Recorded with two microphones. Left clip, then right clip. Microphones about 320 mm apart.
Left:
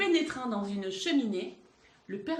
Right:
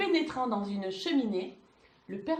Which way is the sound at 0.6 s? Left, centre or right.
Centre.